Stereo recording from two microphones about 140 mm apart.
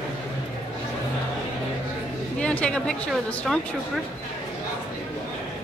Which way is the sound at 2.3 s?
10° left (ahead or behind).